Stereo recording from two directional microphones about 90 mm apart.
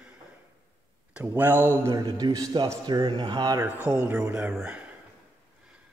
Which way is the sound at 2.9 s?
55° right (ahead or behind).